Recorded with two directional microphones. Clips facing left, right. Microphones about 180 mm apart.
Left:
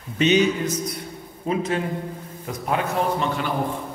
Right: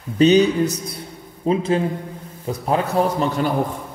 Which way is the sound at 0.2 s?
35° right (ahead or behind).